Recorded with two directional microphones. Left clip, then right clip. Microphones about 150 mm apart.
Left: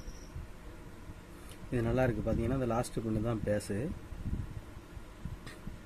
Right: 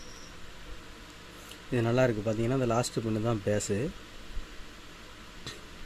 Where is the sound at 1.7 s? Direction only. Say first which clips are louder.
Right 5 dB; 50° right (ahead or behind).